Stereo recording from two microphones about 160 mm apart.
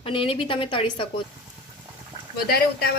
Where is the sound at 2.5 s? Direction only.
75° left (ahead or behind).